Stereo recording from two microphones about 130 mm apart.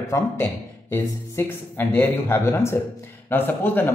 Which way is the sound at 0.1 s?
20° left (ahead or behind).